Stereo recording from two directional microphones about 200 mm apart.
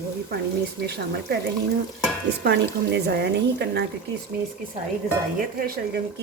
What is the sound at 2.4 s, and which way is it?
Speech, 55° right (ahead or behind).